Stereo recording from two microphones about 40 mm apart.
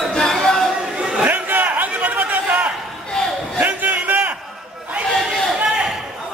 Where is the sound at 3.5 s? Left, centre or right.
Right.